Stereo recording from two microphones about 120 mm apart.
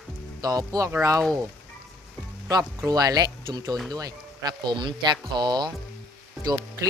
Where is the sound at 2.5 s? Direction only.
30° right (ahead or behind).